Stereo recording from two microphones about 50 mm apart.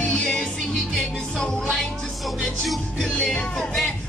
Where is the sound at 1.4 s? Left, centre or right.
Centre.